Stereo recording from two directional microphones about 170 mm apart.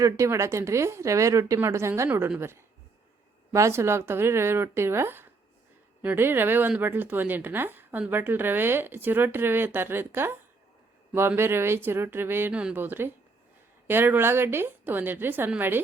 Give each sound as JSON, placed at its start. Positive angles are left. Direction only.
{"t": 0.0, "sound": "speech", "side_deg": -15}